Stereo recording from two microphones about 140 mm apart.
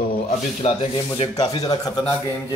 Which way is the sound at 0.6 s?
50° left (ahead or behind).